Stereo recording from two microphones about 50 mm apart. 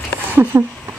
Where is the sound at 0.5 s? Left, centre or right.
Right.